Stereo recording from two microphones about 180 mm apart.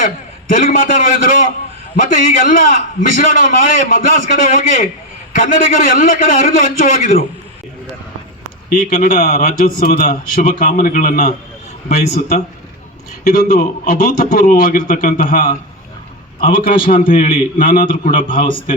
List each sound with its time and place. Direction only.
0.5 s speech: 45° left (ahead or behind)
2.0 s speech: 45° left (ahead or behind)
8.7 s a man's voice: 50° left (ahead or behind)
13.2 s speech: 45° left (ahead or behind)